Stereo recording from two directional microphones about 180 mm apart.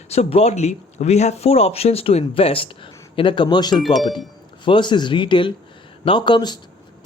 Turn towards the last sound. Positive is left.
turn(degrees=25)  # may be behind; listen again after turning